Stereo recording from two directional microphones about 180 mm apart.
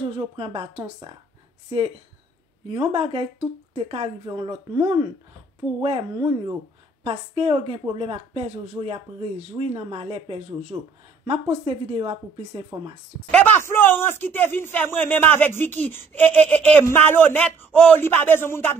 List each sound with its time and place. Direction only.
0.0 s speech: 30° right (ahead or behind)
2.7 s speech: 30° right (ahead or behind)
4.3 s speech: 20° right (ahead or behind)
13.3 s a man's voice: 10° left (ahead or behind)